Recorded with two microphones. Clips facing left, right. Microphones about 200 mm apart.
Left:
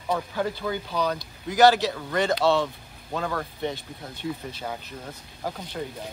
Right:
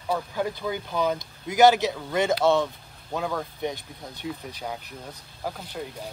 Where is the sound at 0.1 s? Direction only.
10° right (ahead or behind).